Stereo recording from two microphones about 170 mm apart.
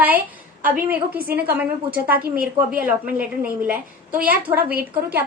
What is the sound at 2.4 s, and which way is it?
Speech, 10° right (ahead or behind).